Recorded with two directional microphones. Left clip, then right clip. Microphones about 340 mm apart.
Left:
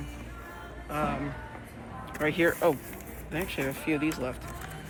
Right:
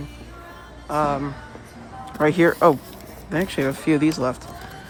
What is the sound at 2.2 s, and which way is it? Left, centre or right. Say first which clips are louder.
Speech: right 9 dB; right.